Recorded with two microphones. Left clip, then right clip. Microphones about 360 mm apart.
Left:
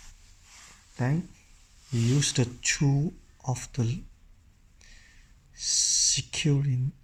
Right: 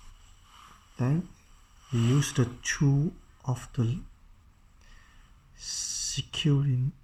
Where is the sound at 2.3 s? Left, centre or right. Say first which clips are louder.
Left 2 dB; left.